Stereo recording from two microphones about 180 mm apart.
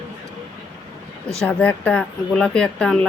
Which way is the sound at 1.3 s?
5° left (ahead or behind).